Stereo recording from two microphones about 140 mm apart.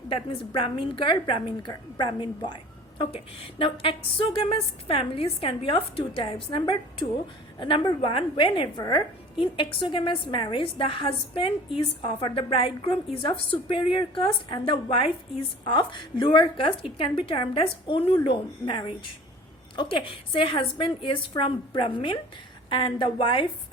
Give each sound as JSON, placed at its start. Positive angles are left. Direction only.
{"t": 0.1, "sound": "a woman's voice", "side_deg": 40}